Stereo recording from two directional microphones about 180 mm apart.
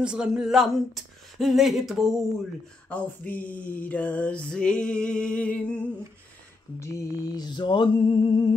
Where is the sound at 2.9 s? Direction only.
10° left (ahead or behind).